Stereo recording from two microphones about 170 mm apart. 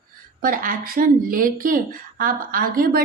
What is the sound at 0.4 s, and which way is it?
A woman's voice, 55° right (ahead or behind).